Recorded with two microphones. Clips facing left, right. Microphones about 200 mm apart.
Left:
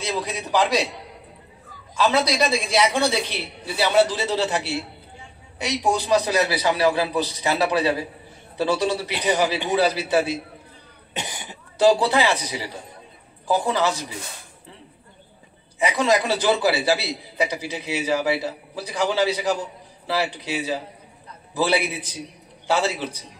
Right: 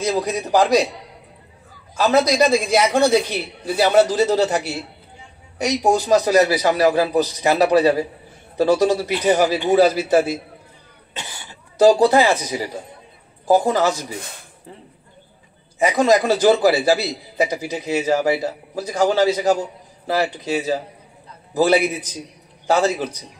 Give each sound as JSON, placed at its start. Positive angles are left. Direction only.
{"t": 0.0, "sound": "a man's voice", "side_deg": -45}
{"t": 2.0, "sound": "a man's voice", "side_deg": -45}
{"t": 11.1, "sound": "speech", "side_deg": 15}
{"t": 11.8, "sound": "a man's voice", "side_deg": -45}
{"t": 15.8, "sound": "a man's voice", "side_deg": -45}